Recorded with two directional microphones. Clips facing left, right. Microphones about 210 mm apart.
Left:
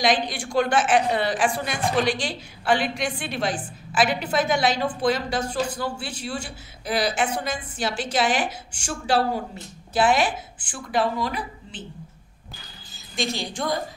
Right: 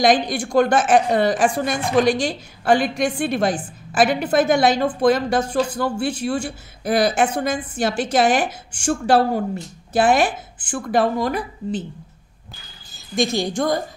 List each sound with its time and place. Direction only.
0.0 s a woman's voice: 45° right (ahead or behind)
13.1 s a woman's voice: 45° right (ahead or behind)